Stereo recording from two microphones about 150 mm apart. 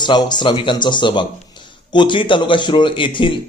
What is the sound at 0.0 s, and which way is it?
A man's voice, 30° left (ahead or behind).